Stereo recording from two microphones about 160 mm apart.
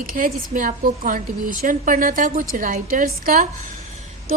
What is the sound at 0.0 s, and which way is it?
A woman's voice, 60° right (ahead or behind).